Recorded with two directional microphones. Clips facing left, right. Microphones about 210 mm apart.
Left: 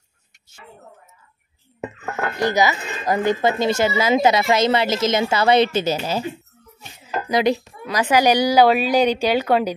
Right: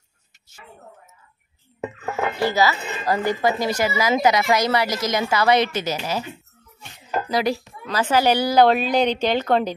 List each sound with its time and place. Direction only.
2.3 s a woman's voice: 20° left (ahead or behind)
7.2 s a woman's voice: 20° left (ahead or behind)